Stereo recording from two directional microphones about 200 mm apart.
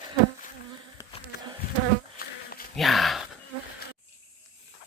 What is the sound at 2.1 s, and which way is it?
Bee, 45° left (ahead or behind).